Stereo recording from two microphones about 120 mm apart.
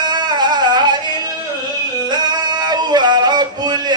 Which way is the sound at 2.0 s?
35° right (ahead or behind).